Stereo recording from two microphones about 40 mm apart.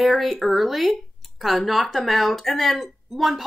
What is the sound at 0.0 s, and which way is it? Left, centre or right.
Speech, centre.